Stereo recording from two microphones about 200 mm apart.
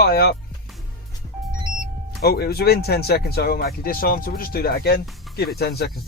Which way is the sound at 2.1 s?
50° left (ahead or behind).